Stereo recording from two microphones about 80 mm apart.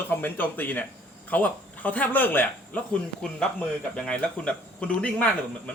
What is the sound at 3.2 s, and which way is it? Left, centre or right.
Speech, centre.